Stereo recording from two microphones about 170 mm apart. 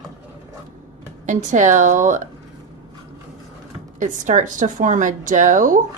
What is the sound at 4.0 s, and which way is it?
Speech, 45° right (ahead or behind).